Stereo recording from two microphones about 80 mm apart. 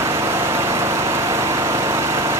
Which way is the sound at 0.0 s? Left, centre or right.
Right.